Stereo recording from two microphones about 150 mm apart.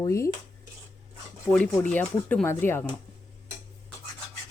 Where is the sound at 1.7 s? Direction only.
10° left (ahead or behind).